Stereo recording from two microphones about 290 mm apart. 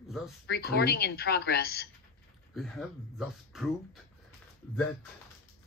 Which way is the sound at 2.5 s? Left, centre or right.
Centre.